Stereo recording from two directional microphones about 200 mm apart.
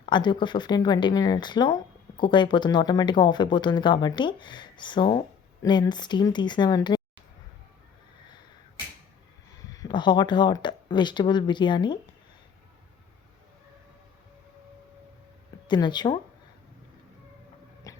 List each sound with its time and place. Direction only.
0.0 s speech: 20° left (ahead or behind)
9.7 s speech: 20° left (ahead or behind)
15.6 s speech: 20° left (ahead or behind)
17.9 s a sound: 15° left (ahead or behind)